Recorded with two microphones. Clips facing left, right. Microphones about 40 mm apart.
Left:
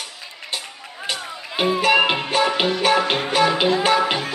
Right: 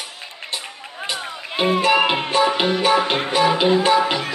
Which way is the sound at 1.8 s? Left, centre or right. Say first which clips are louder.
Left 3 dB; centre.